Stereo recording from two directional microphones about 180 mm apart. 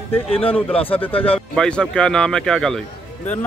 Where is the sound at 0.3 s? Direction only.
30° left (ahead or behind).